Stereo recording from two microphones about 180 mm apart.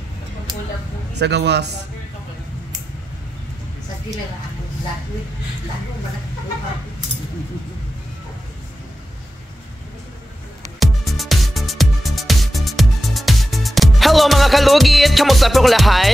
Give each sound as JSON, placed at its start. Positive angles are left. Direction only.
{"t": 1.1, "sound": "speech", "side_deg": -70}
{"t": 10.8, "sound": "music", "side_deg": 0}